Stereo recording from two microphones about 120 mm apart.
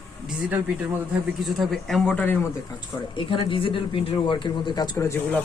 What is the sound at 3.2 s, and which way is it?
Speech, 45° left (ahead or behind).